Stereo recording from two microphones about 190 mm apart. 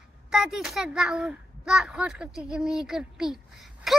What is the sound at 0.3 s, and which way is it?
A child's voice, 5° right (ahead or behind).